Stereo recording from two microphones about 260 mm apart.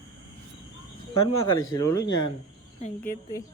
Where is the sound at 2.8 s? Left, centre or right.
Left.